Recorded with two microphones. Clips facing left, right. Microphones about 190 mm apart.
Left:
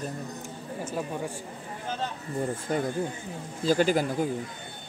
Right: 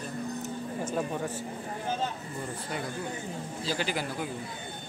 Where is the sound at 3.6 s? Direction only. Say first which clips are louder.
Left 10 dB; 50° left (ahead or behind).